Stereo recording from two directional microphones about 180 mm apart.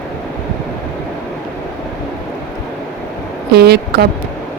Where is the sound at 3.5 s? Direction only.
65° right (ahead or behind).